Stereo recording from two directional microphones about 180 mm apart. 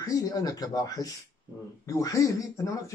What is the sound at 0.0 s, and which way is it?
Speech, 20° left (ahead or behind).